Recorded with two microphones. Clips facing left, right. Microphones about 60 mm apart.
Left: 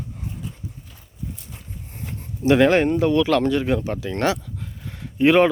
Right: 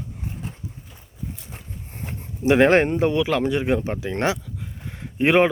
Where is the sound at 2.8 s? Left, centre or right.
Right.